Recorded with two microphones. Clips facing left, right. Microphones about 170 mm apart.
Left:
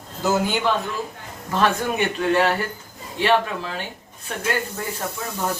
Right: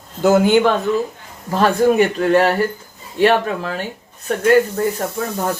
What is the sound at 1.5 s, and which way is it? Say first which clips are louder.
A man's voice: right 8 dB; 40° right (ahead or behind).